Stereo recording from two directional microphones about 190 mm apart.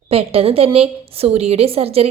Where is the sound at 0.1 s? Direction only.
30° right (ahead or behind).